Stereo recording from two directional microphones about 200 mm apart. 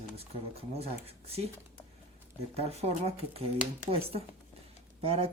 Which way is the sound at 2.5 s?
30° right (ahead or behind).